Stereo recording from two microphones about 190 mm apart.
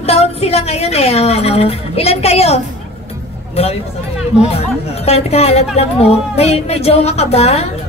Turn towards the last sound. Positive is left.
turn(degrees=35)  # may be behind; listen again after turning